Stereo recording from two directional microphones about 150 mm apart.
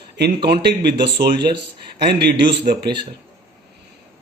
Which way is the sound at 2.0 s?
90° right.